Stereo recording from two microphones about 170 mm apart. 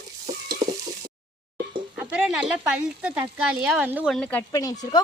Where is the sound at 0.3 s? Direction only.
20° right (ahead or behind).